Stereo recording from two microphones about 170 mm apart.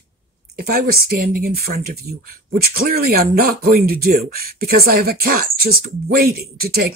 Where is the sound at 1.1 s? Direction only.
60° right (ahead or behind).